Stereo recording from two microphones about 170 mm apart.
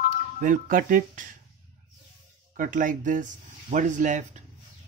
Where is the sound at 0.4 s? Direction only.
50° right (ahead or behind).